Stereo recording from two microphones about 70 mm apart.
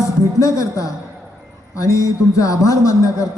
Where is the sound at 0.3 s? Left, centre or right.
Left.